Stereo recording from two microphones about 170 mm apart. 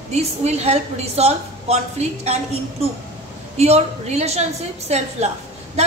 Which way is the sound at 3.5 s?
40° right (ahead or behind).